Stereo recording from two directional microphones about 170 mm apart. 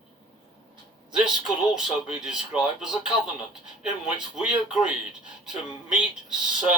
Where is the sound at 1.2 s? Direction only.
5° right (ahead or behind).